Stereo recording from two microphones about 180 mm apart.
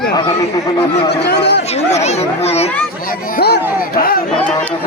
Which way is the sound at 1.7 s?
35° left (ahead or behind).